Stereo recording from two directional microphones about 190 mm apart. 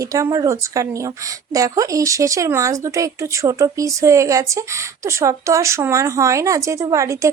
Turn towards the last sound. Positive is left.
turn(degrees=-15)  # may be behind; listen again after turning